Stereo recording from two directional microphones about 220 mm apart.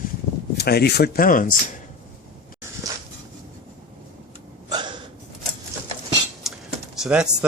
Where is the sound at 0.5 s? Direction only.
45° left (ahead or behind).